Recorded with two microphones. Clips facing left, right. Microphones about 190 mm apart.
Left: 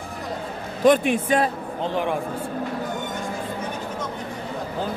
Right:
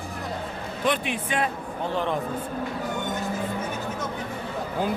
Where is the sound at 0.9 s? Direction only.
40° left (ahead or behind).